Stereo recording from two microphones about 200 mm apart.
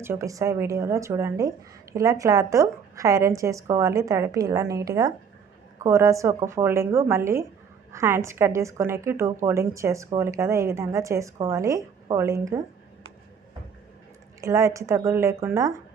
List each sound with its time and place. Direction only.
0.0 s speech: 15° right (ahead or behind)
14.4 s speech: 15° right (ahead or behind)